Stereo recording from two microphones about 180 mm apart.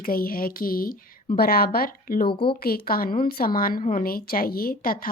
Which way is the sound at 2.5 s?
55° left (ahead or behind).